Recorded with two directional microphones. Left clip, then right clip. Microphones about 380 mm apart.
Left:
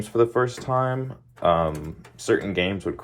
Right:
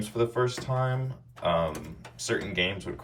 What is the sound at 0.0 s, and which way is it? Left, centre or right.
Speech, centre.